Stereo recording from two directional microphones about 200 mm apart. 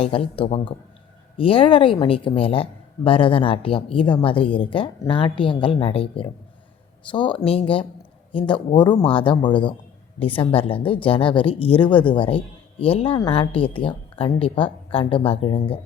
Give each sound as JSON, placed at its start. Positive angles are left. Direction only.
{"t": 0.0, "sound": "speech", "side_deg": 30}